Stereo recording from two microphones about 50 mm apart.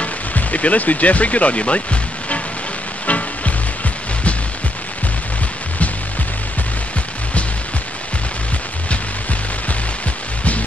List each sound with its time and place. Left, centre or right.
0.0 s speech: left
3.1 s music: left